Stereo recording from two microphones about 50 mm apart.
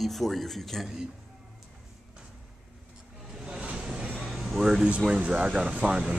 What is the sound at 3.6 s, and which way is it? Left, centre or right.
Music, centre.